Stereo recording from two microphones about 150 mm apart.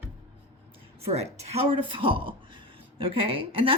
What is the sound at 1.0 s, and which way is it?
A woman's voice, 45° right (ahead or behind).